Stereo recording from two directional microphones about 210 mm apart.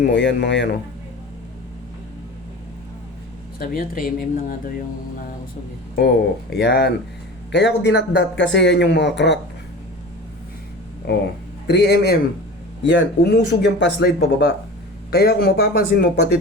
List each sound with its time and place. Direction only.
0.0 s speech: 55° left (ahead or behind)
3.6 s speech: 45° left (ahead or behind)
6.5 s speech: 50° left (ahead or behind)
11.0 s speech: 45° left (ahead or behind)